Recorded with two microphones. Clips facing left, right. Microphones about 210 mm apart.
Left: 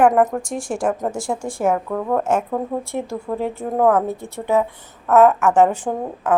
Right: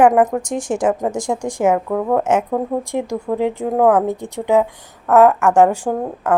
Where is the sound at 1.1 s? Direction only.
15° right (ahead or behind).